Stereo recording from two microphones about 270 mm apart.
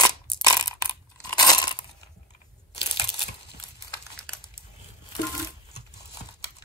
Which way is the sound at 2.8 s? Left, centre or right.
Left.